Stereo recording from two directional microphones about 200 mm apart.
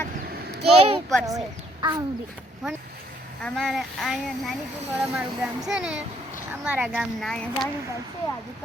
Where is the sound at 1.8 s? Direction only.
20° right (ahead or behind).